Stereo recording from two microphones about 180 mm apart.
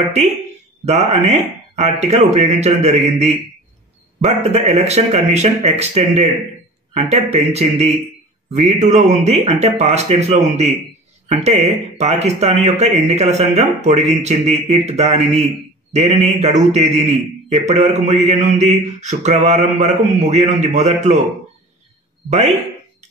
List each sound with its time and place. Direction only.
0.8 s speech: 35° right (ahead or behind)
22.3 s speech: 35° right (ahead or behind)